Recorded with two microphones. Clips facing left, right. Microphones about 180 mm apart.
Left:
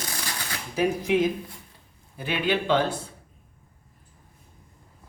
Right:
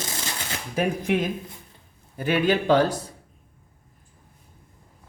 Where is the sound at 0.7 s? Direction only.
55° right (ahead or behind).